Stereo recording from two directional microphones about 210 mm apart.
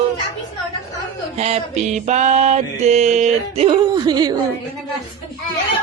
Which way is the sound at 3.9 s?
20° right (ahead or behind).